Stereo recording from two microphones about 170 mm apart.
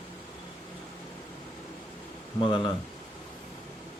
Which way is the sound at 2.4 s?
30° left (ahead or behind).